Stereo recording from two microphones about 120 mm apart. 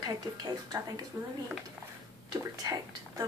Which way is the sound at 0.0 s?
35° right (ahead or behind).